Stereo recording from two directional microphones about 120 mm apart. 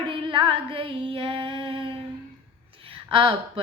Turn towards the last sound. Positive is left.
turn(degrees=-50)  # may be behind; listen again after turning